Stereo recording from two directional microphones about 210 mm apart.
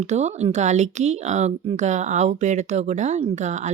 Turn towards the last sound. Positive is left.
turn(degrees=-35)  # may be behind; listen again after turning